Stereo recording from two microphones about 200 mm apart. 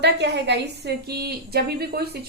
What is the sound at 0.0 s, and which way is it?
A woman's voice, 60° right (ahead or behind).